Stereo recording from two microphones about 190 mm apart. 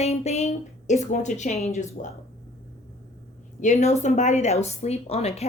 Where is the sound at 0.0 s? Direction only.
35° left (ahead or behind).